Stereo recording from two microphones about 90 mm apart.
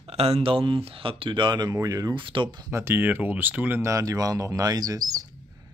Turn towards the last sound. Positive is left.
turn(degrees=-45)  # may be behind; listen again after turning